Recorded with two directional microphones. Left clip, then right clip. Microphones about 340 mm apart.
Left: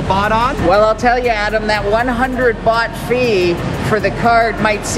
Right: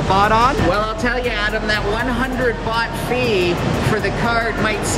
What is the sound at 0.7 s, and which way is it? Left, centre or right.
Speech, centre.